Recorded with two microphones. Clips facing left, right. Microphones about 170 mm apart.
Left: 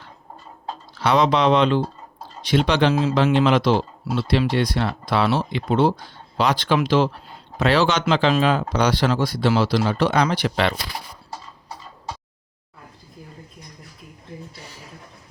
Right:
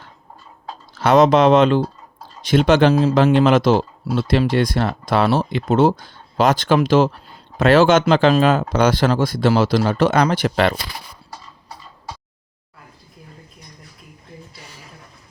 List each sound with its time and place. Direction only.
0.9 s speech: 45° right (ahead or behind)
2.9 s speech: 35° right (ahead or behind)